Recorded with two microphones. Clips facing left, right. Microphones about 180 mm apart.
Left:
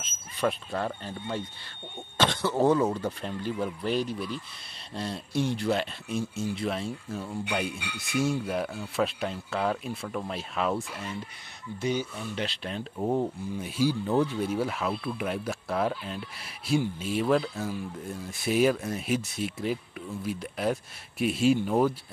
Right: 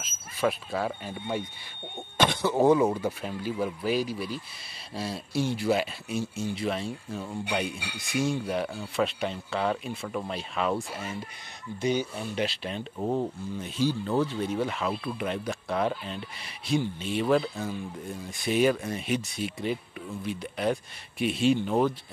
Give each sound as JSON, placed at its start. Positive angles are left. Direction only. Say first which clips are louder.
{"t": 0.0, "sound": "speech", "louder": "right 1 dB", "side_deg": -5}
{"t": 11.8, "sound": "speech", "louder": "right 2 dB", "side_deg": -20}
{"t": 12.4, "sound": "speech", "louder": "right 1 dB", "side_deg": 0}